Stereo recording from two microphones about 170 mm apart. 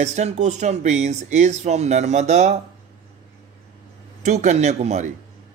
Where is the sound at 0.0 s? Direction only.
40° right (ahead or behind).